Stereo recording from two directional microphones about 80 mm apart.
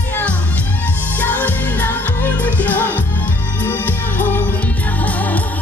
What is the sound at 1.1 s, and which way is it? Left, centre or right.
Music, left.